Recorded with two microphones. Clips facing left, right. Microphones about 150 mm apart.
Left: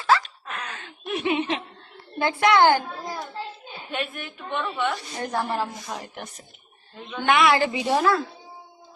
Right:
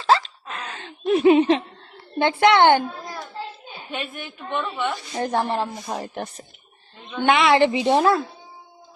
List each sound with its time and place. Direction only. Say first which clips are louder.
0.0 s hiccup: right 2 dB; 25° right (ahead or behind)
2.1 s a woman's voice: right 3 dB; 25° right (ahead or behind)
3.9 s a woman's voice: left 1 dB; centre (ahead or behind)
5.1 s a woman's voice: right 4 dB; 30° right (ahead or behind)